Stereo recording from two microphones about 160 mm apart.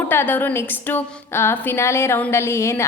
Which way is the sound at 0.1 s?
15° left (ahead or behind).